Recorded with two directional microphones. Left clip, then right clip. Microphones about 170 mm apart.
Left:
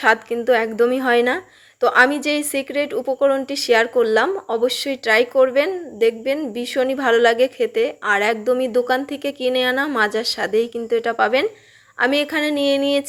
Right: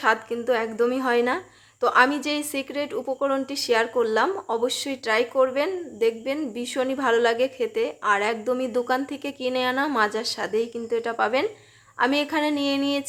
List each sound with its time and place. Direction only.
0.0 s a woman's voice: 25° left (ahead or behind)